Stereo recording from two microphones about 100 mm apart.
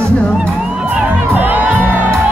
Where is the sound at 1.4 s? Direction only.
15° right (ahead or behind).